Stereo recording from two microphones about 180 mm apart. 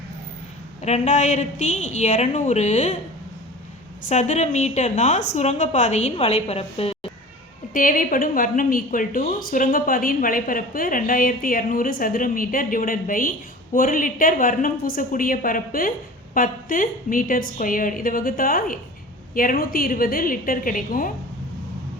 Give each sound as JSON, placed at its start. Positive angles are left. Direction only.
{"t": 0.8, "sound": "a woman's voice", "side_deg": 40}
{"t": 4.1, "sound": "a woman's voice", "side_deg": 40}
{"t": 7.7, "sound": "a woman's voice", "side_deg": 50}